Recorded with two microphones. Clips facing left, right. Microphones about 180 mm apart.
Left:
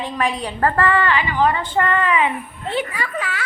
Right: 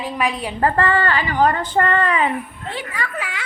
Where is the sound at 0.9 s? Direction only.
35° right (ahead or behind).